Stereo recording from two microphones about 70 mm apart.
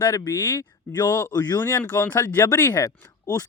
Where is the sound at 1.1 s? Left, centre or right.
Left.